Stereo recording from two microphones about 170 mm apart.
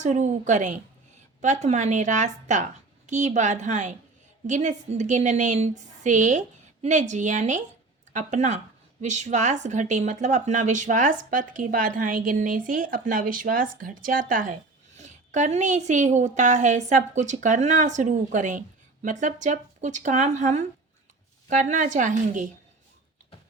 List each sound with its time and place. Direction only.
0.0 s speech: 45° right (ahead or behind)